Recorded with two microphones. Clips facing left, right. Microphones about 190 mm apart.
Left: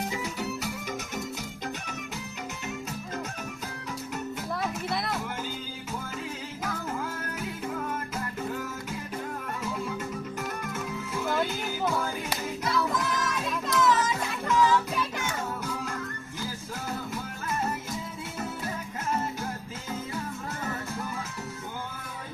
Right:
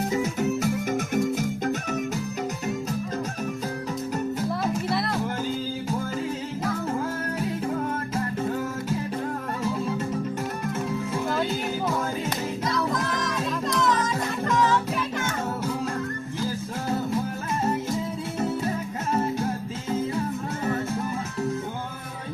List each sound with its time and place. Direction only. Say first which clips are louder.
0.1 s music: right 8 dB; 45° right (ahead or behind)
4.9 s music: right 5 dB; centre (ahead or behind)
12.7 s music: even; centre (ahead or behind)